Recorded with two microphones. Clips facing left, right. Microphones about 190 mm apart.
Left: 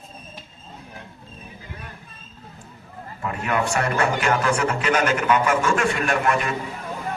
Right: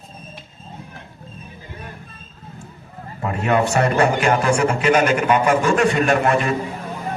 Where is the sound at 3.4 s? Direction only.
25° right (ahead or behind).